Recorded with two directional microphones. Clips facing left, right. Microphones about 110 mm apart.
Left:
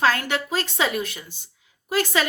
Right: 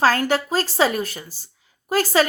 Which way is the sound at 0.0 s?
40° right (ahead or behind).